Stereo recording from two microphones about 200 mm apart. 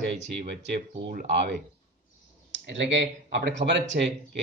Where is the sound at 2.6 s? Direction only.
65° right (ahead or behind).